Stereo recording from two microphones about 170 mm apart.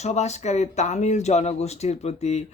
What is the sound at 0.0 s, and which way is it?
Speech, 40° left (ahead or behind).